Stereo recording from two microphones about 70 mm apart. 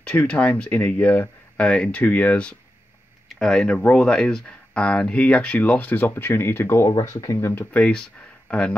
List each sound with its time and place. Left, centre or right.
0.0 s speech: centre
1.6 s speech: centre
3.3 s a sound: centre
3.6 s speech: centre; by 6.9 s left
6.9 s speech: left
7.5 s speech: centre